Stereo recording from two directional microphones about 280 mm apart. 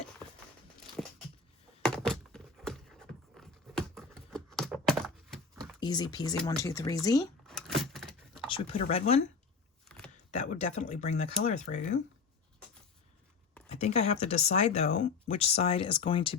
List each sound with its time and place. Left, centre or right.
1.0 s a sound: centre
5.8 s speech: centre
7.4 s vehicle: centre
8.4 s speech: centre
10.3 s speech: left
13.7 s speech: left